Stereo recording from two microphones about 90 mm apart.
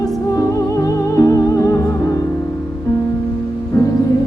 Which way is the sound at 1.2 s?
40° left (ahead or behind).